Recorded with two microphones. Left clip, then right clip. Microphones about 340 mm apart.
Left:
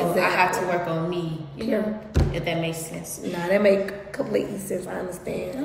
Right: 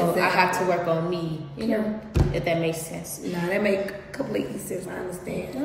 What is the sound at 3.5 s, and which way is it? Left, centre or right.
Speech, centre.